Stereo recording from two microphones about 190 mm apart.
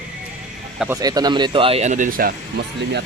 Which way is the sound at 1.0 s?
20° right (ahead or behind).